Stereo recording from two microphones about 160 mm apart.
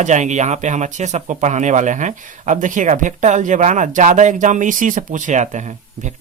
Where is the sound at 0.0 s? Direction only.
50° right (ahead or behind).